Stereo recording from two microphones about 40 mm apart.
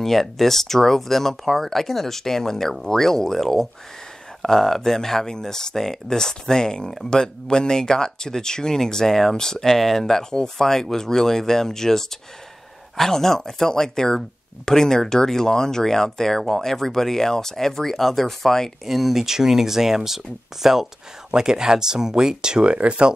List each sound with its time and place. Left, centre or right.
0.0 s speech: centre
18.9 s speech: centre; by 23.1 s right